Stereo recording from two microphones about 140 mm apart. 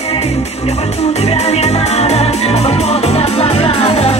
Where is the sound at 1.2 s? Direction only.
50° left (ahead or behind).